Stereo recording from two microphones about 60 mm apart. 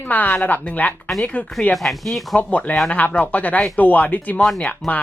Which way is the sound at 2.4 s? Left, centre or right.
Left.